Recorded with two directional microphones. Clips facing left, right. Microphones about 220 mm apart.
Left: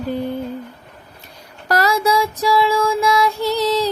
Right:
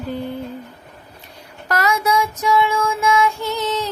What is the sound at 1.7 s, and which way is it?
Music, 35° left (ahead or behind).